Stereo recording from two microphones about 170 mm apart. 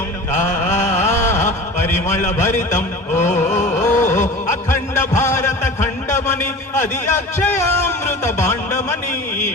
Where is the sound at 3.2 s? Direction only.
45° left (ahead or behind).